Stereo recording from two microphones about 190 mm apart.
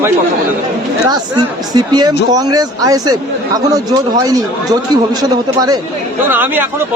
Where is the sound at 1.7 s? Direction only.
20° right (ahead or behind).